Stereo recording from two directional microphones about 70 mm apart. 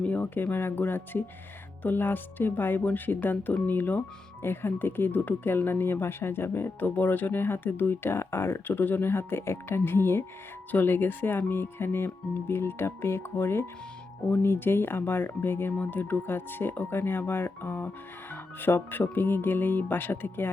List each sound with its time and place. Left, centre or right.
0.0 s speech: left